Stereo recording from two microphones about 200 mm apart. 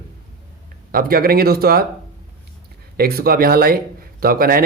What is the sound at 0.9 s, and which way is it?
Speech, 45° right (ahead or behind).